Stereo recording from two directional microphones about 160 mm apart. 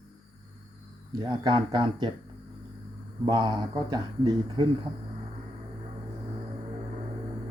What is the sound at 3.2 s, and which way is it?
Speech, 25° right (ahead or behind).